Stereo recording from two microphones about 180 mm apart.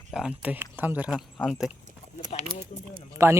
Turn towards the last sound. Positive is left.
turn(degrees=-15)  # may be behind; listen again after turning